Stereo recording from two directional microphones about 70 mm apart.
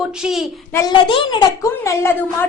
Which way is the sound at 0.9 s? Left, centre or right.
Left.